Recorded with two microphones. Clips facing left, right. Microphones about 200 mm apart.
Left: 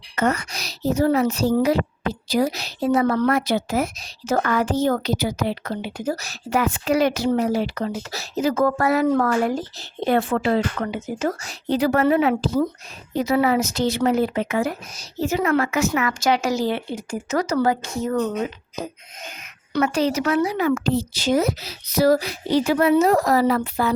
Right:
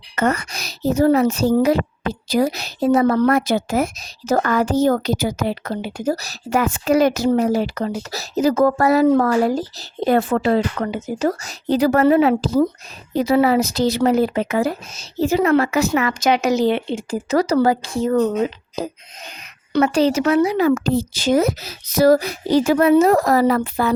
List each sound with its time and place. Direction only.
0.2 s a woman's voice: 55° right (ahead or behind); by 20.6 s 25° right (ahead or behind)
20.6 s a woman's voice: 40° right (ahead or behind)